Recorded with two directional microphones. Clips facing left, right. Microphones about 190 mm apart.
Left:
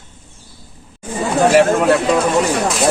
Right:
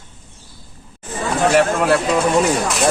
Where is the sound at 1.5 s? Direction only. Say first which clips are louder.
Left 3 dB; centre (ahead or behind).